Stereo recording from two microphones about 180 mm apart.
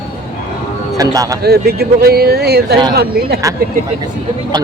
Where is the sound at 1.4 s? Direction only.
60° right (ahead or behind).